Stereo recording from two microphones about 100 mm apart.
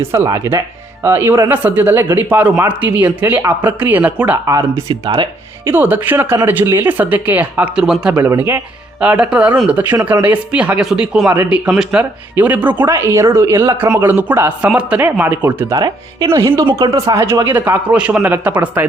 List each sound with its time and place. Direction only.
0.1 s a man's voice: 30° right (ahead or behind); by 4.4 s 15° right (ahead or behind)
4.4 s speech: 30° right (ahead or behind)
5.0 s speech: 50° right (ahead or behind)
5.6 s a man's voice: 20° right (ahead or behind)
9.0 s a man's voice: 10° right (ahead or behind); by 13.7 s 30° right (ahead or behind)
14.0 s a man's voice: 20° right (ahead or behind)
15.7 s a man's voice: 40° right (ahead or behind); by 18.9 s 20° right (ahead or behind)